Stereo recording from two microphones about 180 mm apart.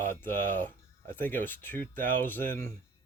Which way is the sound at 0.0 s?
10° left (ahead or behind).